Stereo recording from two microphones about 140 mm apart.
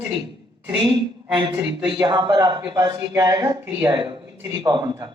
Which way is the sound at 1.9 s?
30° right (ahead or behind).